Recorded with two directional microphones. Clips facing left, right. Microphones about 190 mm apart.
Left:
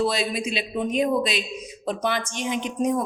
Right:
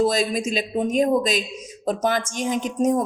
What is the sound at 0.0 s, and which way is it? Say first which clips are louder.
Speech: right 4 dB; 45° right (ahead or behind).